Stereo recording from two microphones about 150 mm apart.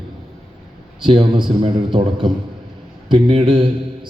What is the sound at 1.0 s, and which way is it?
Speech, 35° right (ahead or behind).